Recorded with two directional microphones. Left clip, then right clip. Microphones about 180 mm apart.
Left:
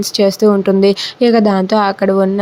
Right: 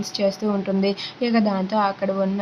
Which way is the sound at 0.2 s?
40° left (ahead or behind).